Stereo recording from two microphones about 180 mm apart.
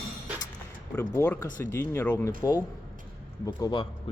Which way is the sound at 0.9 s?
15° left (ahead or behind).